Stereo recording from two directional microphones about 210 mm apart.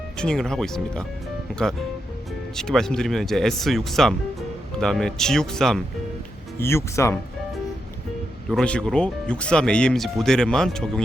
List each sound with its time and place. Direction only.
0.2 s speech: 5° left (ahead or behind)
2.6 s speech: centre (ahead or behind)
8.4 s speech: 5° left (ahead or behind)